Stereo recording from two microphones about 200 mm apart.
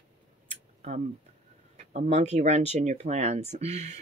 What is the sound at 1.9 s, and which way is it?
Speech, 35° right (ahead or behind).